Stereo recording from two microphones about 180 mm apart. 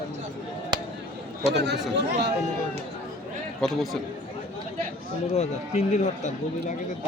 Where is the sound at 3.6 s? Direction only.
Centre (ahead or behind).